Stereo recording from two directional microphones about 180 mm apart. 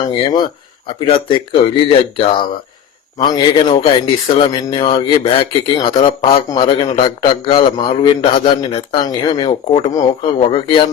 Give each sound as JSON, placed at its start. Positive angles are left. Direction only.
{"t": 0.0, "sound": "a man's voice", "side_deg": 25}